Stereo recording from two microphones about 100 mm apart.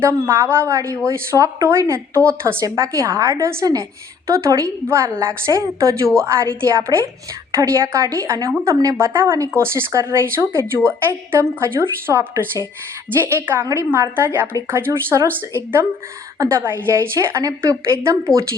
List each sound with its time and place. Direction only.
0.0 s a woman's voice: 25° right (ahead or behind)